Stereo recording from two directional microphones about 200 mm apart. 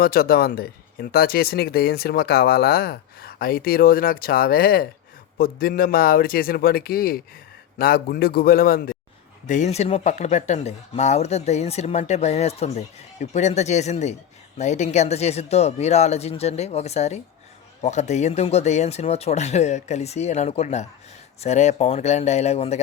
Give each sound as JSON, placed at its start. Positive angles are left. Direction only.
{"t": 0.0, "sound": "speech", "side_deg": 50}
{"t": 9.5, "sound": "speech", "side_deg": 35}